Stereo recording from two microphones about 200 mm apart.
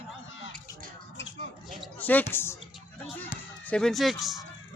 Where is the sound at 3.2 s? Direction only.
5° left (ahead or behind).